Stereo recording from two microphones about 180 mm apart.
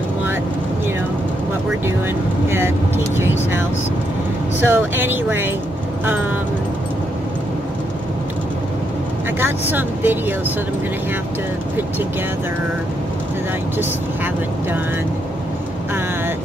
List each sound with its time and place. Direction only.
4.6 s speech: 10° right (ahead or behind)
9.4 s speech: 10° right (ahead or behind)
13.7 s speech: 10° right (ahead or behind)